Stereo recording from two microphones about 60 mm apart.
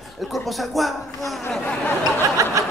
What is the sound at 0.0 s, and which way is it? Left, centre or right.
Speech, centre.